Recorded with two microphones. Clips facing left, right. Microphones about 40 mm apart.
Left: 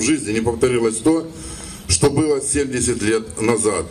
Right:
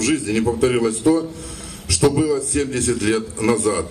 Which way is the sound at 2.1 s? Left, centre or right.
Left.